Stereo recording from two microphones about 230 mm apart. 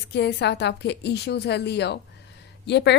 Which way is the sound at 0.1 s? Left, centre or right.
Left.